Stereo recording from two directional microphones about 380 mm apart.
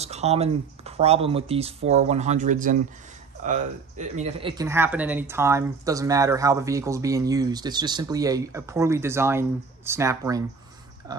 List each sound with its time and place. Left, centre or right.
0.0 s speech: centre